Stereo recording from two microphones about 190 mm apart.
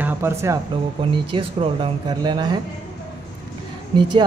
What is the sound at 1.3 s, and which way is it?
Speech, 25° right (ahead or behind).